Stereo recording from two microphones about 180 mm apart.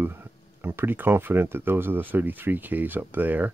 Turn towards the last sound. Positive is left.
turn(degrees=-10)  # may be behind; listen again after turning